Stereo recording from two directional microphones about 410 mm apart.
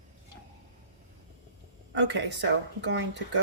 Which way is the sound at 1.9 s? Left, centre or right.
Right.